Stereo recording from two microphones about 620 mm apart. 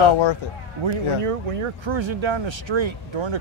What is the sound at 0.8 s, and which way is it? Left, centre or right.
Speech, right.